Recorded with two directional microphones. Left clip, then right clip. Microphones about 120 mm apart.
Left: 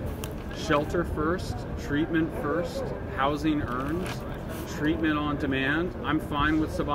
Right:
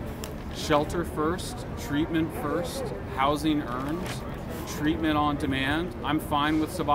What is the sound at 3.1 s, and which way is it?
Speech, 40° right (ahead or behind).